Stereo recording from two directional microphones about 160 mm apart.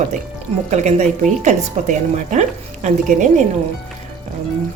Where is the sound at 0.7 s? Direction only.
45° right (ahead or behind).